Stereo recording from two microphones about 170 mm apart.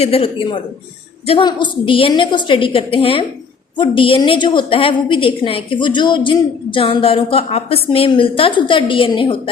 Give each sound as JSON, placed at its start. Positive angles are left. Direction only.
{"t": 0.0, "sound": "a woman's voice", "side_deg": 35}